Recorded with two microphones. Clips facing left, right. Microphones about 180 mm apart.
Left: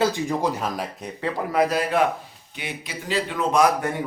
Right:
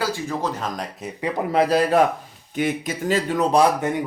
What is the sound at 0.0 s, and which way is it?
Speech, 15° left (ahead or behind).